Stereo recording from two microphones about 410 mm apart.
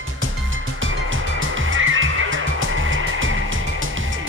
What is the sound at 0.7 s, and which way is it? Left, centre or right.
Music, right.